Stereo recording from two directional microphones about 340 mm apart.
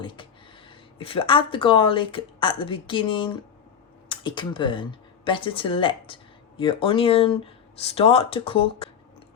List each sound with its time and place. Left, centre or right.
0.0 s speech: centre